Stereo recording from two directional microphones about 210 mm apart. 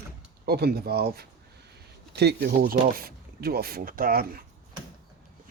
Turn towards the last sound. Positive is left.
turn(degrees=-45)  # may be behind; listen again after turning